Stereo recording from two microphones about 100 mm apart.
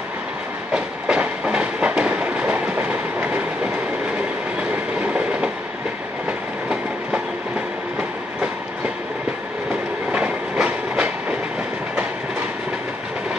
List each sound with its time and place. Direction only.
0.7 s train: 10° right (ahead or behind)
5.0 s train: 10° right (ahead or behind)
10.1 s train: 10° right (ahead or behind)